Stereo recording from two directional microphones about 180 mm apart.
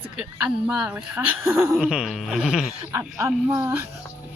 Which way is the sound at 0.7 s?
5° right (ahead or behind).